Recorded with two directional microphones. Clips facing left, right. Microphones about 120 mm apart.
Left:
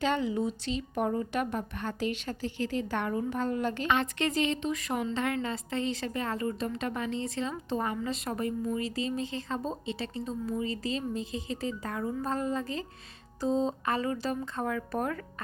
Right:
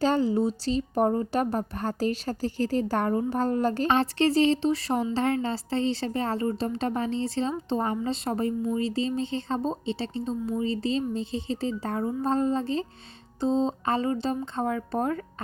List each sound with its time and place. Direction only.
0.0 s a woman's voice: 35° right (ahead or behind)